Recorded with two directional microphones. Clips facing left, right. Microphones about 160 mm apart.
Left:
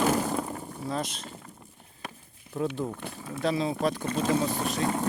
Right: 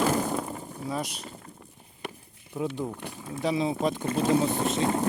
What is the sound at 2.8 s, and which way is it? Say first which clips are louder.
Speech: even; 10° right (ahead or behind).